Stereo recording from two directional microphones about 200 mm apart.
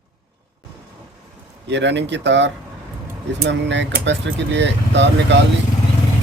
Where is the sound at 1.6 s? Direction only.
60° right (ahead or behind).